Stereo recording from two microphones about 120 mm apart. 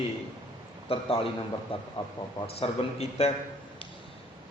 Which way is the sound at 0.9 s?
50° left (ahead or behind).